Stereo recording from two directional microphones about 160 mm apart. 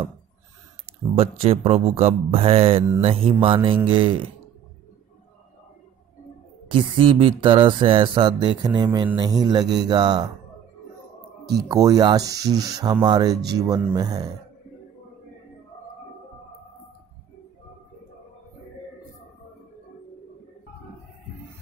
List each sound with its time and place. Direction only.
1.1 s music: 35° right (ahead or behind)
6.7 s music: 30° right (ahead or behind)
11.7 s speech: 25° right (ahead or behind)